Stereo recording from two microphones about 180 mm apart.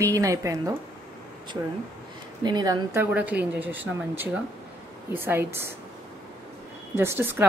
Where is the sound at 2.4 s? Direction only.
20° right (ahead or behind).